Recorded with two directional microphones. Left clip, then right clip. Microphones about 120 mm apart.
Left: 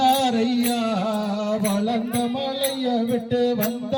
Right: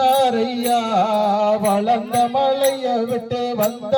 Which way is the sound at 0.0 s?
30° right (ahead or behind).